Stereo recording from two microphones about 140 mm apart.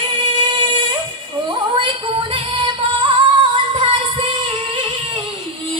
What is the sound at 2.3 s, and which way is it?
Music, 40° right (ahead or behind).